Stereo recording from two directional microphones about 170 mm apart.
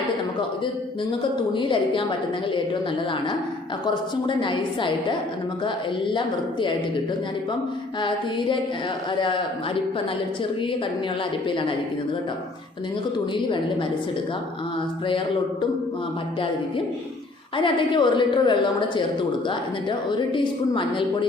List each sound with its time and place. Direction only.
1.5 s a woman's voice: 30° left (ahead or behind)
4.3 s a woman's voice: 30° left (ahead or behind)
6.1 s a woman's voice: 30° left (ahead or behind)
9.1 s a woman's voice: 30° left (ahead or behind)
13.1 s a woman's voice: 30° left (ahead or behind)
17.6 s a woman's voice: 30° left (ahead or behind)